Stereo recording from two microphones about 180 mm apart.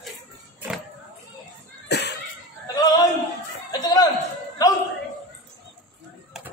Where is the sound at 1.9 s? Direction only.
70° left (ahead or behind).